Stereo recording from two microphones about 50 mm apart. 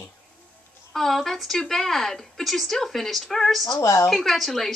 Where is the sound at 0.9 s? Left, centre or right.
Centre.